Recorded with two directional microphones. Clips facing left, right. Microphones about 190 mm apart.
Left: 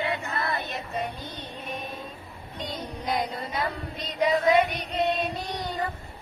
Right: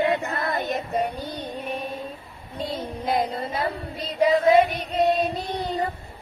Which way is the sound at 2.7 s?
30° right (ahead or behind).